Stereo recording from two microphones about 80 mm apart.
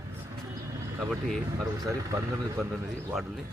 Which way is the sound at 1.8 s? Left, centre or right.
Right.